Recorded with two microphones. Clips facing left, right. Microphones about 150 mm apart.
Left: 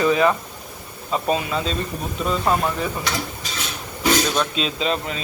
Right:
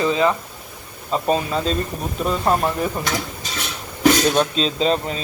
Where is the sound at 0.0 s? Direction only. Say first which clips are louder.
Left 1 dB; 20° right (ahead or behind).